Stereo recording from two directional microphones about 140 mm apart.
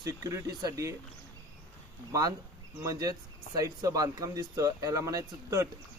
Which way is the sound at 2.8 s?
25° right (ahead or behind).